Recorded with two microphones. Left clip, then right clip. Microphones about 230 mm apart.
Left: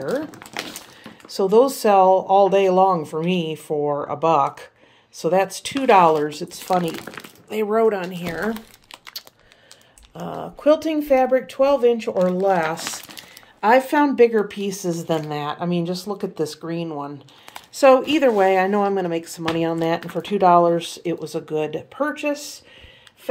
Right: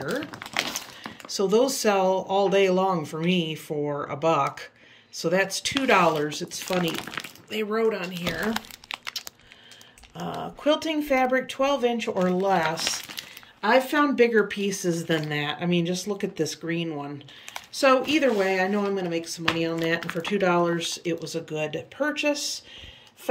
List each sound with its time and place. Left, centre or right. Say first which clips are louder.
0.0 s crumpling: left 5 dB; centre
1.3 s speech: left 6 dB; centre
7.1 s a sound: left 1 dB; centre
7.8 s speech: left 6 dB; centre
10.1 s speech: left 2 dB; centre